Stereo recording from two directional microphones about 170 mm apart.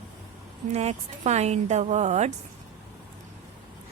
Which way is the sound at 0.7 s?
40° right (ahead or behind).